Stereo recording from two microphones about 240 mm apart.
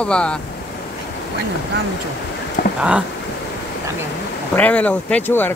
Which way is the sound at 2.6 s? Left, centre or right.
Left.